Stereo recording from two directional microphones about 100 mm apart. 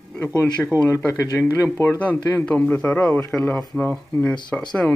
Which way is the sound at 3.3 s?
5° left (ahead or behind).